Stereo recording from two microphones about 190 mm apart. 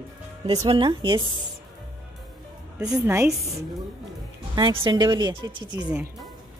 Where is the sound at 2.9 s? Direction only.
15° right (ahead or behind).